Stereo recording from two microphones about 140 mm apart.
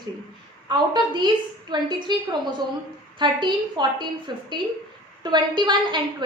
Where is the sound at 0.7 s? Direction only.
30° right (ahead or behind).